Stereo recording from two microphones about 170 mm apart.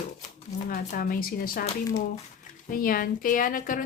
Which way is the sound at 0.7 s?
55° left (ahead or behind).